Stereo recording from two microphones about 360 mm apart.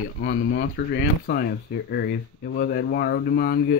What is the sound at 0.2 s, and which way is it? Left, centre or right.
Speech, left.